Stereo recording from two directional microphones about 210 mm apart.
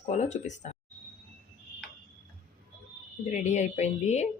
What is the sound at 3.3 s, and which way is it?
Speech, 35° left (ahead or behind).